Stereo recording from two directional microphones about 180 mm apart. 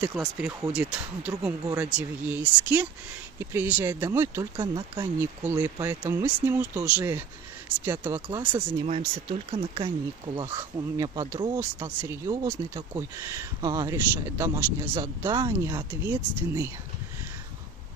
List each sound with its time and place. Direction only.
0.0 s speech: 10° right (ahead or behind)
8.8 s speech: 35° right (ahead or behind); by 16.7 s 15° right (ahead or behind)